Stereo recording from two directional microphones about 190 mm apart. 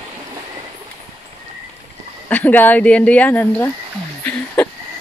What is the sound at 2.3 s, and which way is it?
Speech, 10° left (ahead or behind).